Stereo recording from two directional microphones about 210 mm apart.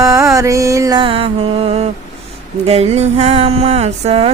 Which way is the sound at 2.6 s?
30° right (ahead or behind).